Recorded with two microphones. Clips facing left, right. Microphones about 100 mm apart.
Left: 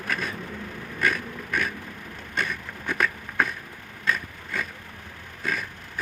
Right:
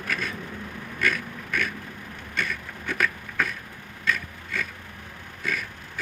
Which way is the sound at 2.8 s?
25° left (ahead or behind).